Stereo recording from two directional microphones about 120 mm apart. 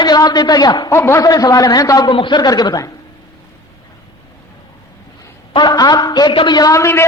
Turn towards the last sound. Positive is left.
turn(degrees=25)  # may be behind; listen again after turning